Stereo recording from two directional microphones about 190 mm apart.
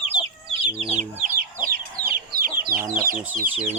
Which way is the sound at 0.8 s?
40° right (ahead or behind).